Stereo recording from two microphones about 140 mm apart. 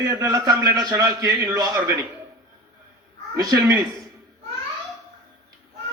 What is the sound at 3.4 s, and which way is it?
Speech, 25° right (ahead or behind).